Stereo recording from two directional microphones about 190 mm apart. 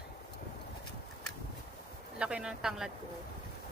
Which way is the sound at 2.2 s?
5° right (ahead or behind).